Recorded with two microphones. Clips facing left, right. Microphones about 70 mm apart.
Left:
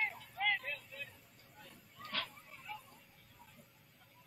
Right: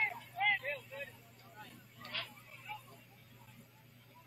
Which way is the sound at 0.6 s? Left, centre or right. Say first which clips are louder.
Right 4 dB; right.